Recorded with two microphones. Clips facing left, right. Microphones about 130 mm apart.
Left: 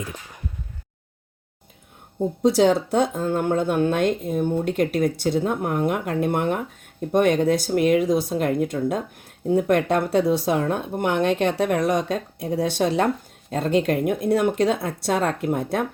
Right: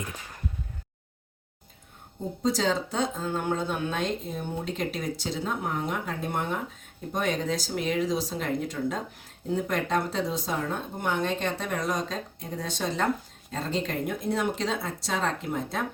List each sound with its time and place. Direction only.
2.4 s speech: 65° left (ahead or behind)